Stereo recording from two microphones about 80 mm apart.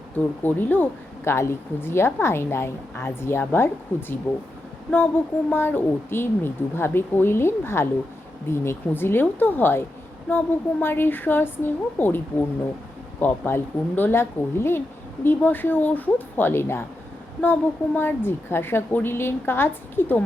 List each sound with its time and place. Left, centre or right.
0.4 s a woman's voice: left
4.3 s a woman's voice: left
5.5 s a woman's voice: left